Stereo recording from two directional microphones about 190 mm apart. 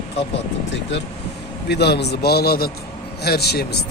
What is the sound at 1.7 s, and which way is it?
A man's voice, 60° left (ahead or behind).